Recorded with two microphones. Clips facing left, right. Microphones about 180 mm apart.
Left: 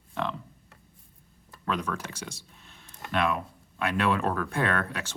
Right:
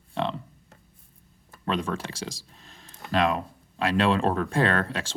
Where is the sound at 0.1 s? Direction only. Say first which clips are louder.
Right 3 dB; 25° right (ahead or behind).